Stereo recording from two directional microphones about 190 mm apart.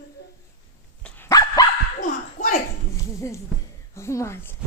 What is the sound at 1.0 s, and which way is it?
Dog, 5° left (ahead or behind).